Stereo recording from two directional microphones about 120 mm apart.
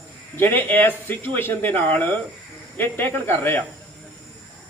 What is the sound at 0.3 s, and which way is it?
Speech, 15° left (ahead or behind).